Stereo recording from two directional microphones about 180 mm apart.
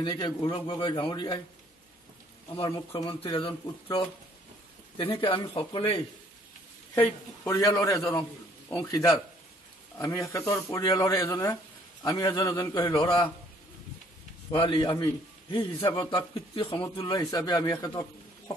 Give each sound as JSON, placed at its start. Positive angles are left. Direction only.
{"t": 0.0, "sound": "speech", "side_deg": 25}
{"t": 2.5, "sound": "speech", "side_deg": 25}
{"t": 7.0, "sound": "a man's voice", "side_deg": 15}
{"t": 14.5, "sound": "speech", "side_deg": 30}